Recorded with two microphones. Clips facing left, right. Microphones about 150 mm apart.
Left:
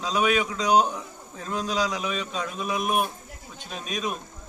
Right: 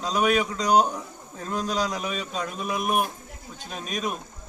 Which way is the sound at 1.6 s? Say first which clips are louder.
Left 1 dB; centre (ahead or behind).